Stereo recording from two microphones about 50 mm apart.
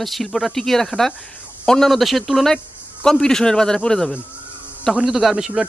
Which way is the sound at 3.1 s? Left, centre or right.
Centre.